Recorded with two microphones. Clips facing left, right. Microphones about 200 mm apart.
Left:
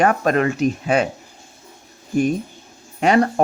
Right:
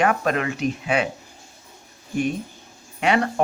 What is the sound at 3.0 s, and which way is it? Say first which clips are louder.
Speech: left 5 dB; 40° left (ahead or behind).